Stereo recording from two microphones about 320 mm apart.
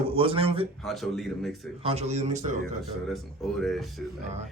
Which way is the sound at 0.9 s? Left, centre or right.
Centre.